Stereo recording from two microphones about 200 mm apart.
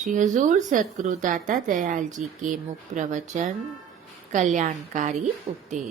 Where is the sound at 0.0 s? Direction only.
40° right (ahead or behind).